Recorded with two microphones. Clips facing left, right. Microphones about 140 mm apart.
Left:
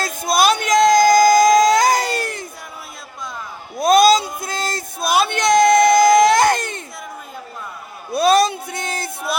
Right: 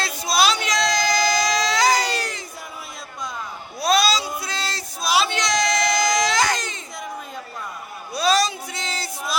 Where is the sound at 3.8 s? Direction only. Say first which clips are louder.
Left 7 dB; 50° left (ahead or behind).